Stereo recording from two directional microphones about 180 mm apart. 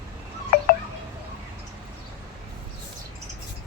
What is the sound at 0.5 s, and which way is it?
Wind chime, 55° left (ahead or behind).